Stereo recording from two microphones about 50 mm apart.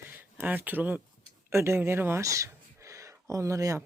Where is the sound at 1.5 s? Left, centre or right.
Right.